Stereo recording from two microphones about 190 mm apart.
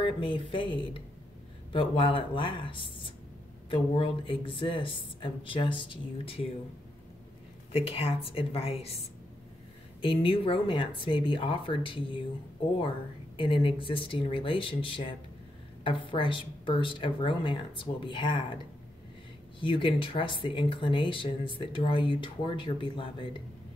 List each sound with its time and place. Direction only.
0.0 s speech: 25° left (ahead or behind)
7.7 s speech: 30° left (ahead or behind)
10.0 s speech: 30° left (ahead or behind)
13.4 s speech: 25° left (ahead or behind)
19.6 s speech: 25° left (ahead or behind)